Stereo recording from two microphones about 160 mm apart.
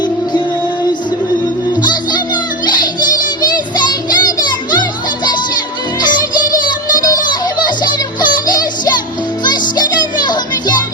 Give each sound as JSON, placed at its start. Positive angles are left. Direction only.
{"t": 1.8, "sound": "music", "side_deg": 25}
{"t": 6.9, "sound": "child singing", "side_deg": 25}
{"t": 9.4, "sound": "music", "side_deg": 25}